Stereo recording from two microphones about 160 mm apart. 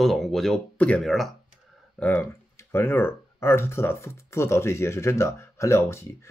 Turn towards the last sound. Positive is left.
turn(degrees=15)  # may be behind; listen again after turning